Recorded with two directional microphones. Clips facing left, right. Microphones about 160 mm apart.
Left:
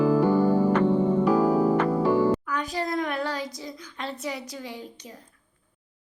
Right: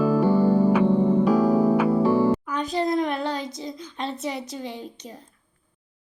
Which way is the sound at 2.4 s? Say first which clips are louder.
Right 4 dB; 20° right (ahead or behind).